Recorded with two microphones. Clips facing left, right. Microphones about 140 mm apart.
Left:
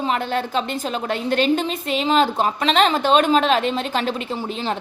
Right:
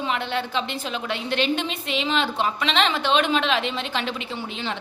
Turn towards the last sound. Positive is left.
turn(degrees=40)  # may be behind; listen again after turning